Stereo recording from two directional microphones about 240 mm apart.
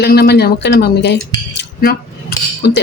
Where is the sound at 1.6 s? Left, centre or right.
Left.